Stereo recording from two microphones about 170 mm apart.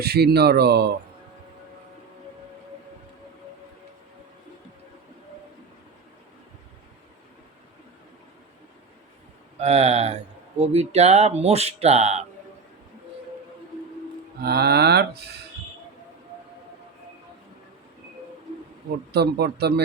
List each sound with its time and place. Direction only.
0.0 s speech: 70° right (ahead or behind)
9.6 s speech: 40° right (ahead or behind)
14.4 s speech: 70° right (ahead or behind)
19.1 s speech: 75° right (ahead or behind)